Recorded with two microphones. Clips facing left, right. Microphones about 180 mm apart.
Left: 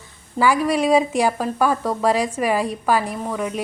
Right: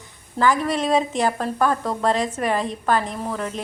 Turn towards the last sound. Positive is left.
turn(degrees=10)  # may be behind; listen again after turning